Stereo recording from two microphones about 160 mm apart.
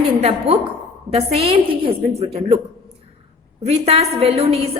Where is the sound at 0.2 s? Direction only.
40° right (ahead or behind).